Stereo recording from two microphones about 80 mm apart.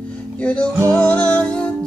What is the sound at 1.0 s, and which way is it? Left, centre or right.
Music, centre.